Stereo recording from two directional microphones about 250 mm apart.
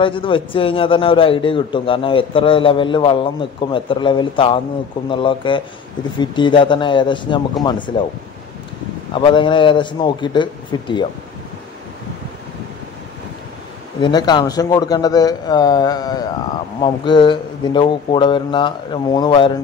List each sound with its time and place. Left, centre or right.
0.0 s a man's voice: left
9.1 s a man's voice: centre
14.0 s a man's voice: centre